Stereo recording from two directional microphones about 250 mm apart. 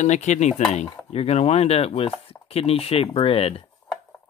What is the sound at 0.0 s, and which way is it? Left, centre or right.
Chopping, left.